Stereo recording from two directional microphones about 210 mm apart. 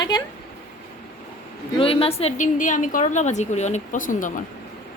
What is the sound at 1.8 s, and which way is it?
A woman's voice, 25° left (ahead or behind).